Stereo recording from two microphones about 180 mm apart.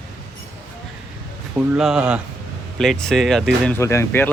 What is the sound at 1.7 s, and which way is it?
Speech, 5° right (ahead or behind).